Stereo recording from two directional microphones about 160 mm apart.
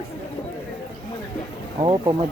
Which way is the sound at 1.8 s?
30° right (ahead or behind).